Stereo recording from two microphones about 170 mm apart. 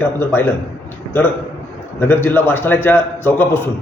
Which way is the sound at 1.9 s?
10° left (ahead or behind).